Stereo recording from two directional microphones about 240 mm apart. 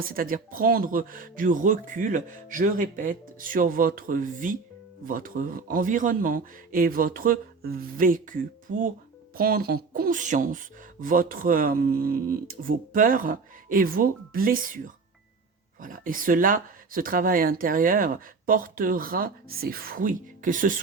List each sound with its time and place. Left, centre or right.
0.0 s speech: right
9.4 s speech: right
15.8 s speech: right